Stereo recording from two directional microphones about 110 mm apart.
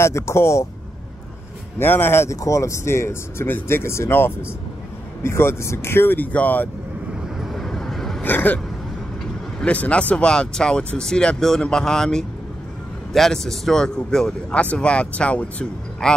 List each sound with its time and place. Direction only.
0.0 s speech: 25° left (ahead or behind)
1.8 s speech: 20° left (ahead or behind)
7.3 s vehicle: centre (ahead or behind)
8.2 s a sound: 15° left (ahead or behind)
9.6 s speech: 10° left (ahead or behind)